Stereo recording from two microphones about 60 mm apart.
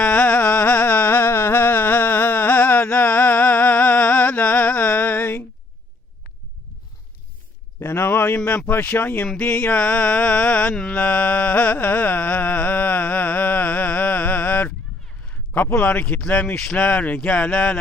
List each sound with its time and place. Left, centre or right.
0.0 s a sound: left
7.8 s a sound: left
8.4 s mantra: left
8.7 s speech: left
9.4 s mantra: left
10.9 s music: left
15.8 s mantra: left